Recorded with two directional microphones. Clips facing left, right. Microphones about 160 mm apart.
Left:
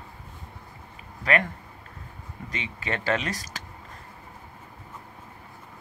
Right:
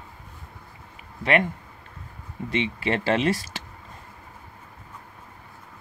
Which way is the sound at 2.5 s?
30° right (ahead or behind).